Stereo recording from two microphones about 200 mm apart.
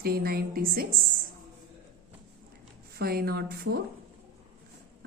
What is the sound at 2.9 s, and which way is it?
Speech, 50° right (ahead or behind).